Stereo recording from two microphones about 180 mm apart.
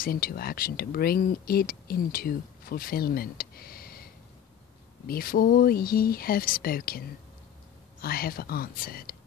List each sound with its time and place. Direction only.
0.0 s speech: 55° left (ahead or behind)